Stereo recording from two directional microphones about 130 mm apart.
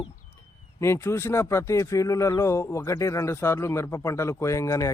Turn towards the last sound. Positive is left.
turn(degrees=25)  # may be behind; listen again after turning